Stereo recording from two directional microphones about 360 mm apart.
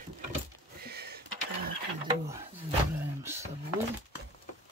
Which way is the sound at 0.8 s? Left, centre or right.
Right.